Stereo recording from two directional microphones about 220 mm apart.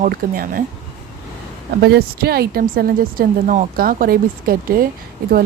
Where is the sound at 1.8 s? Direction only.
45° right (ahead or behind).